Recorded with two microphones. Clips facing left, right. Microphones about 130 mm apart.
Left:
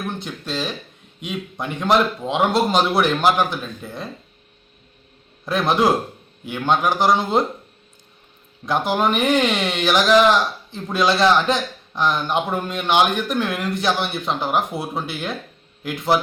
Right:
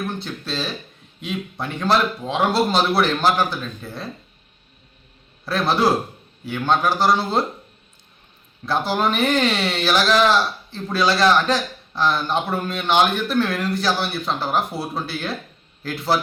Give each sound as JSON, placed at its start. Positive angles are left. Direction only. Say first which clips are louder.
{"t": 0.2, "sound": "a man's voice", "louder": "left 1 dB", "side_deg": 15}
{"t": 5.5, "sound": "a man's voice", "louder": "left 1 dB", "side_deg": 20}
{"t": 8.6, "sound": "a man's voice", "louder": "left 1 dB", "side_deg": 15}